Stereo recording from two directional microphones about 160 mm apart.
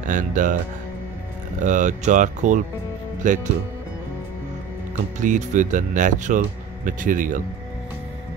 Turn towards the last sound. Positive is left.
turn(degrees=-55)  # may be behind; listen again after turning